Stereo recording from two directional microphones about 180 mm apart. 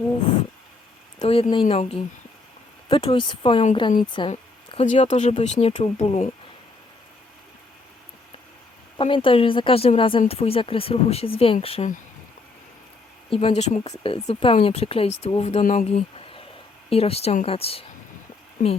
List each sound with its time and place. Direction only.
1.2 s speech: 30° left (ahead or behind)
9.0 s speech: 30° left (ahead or behind)
13.3 s speech: 35° left (ahead or behind)